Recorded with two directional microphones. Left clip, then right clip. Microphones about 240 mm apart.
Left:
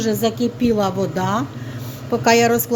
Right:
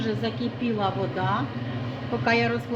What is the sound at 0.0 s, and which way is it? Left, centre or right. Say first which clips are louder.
A woman's voice: left 9 dB; left.